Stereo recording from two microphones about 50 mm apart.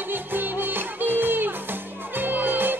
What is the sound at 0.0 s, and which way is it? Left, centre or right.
Music, right.